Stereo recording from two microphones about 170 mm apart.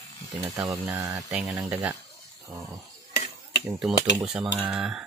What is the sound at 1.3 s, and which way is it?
Speech, 5° right (ahead or behind).